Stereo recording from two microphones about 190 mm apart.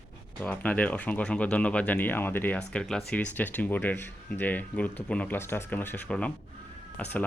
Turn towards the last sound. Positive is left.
turn(degrees=5)  # may be behind; listen again after turning